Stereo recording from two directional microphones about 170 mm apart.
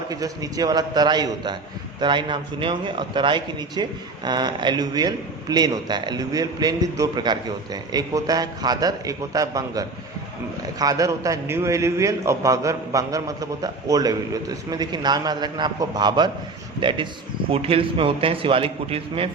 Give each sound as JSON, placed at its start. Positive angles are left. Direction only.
{"t": 0.1, "sound": "a man's voice", "side_deg": -20}
{"t": 17.5, "sound": "a man's voice", "side_deg": -35}